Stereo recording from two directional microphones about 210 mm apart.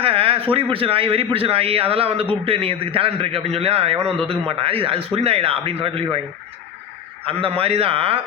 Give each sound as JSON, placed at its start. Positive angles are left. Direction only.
{"t": 0.0, "sound": "a sound", "side_deg": -25}
{"t": 0.5, "sound": "a man's voice", "side_deg": -25}
{"t": 7.3, "sound": "a man's voice", "side_deg": -25}